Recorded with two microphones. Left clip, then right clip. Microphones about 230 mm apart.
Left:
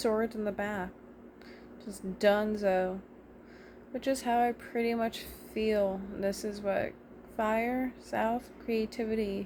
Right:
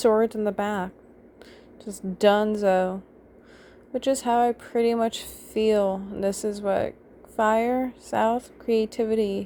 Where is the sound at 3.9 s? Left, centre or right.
Right.